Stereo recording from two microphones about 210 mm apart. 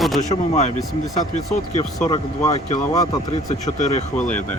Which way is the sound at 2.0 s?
20° left (ahead or behind).